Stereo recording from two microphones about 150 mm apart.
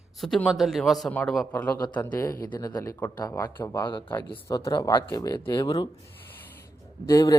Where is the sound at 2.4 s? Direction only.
25° left (ahead or behind).